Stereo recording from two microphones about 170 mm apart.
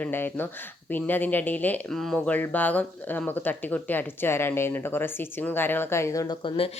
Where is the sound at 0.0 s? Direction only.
10° left (ahead or behind).